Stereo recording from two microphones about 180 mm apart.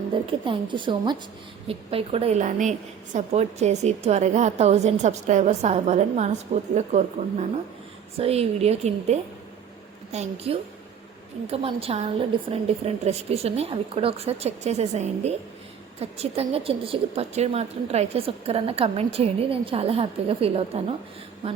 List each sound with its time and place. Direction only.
0.1 s a woman's voice: 30° right (ahead or behind)